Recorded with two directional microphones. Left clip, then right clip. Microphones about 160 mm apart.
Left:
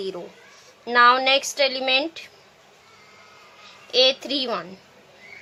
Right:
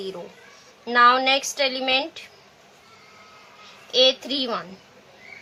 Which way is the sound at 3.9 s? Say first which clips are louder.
Even; 45° left (ahead or behind).